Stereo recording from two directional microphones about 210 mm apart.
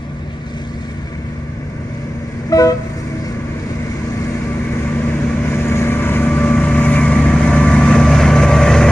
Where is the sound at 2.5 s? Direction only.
15° left (ahead or behind).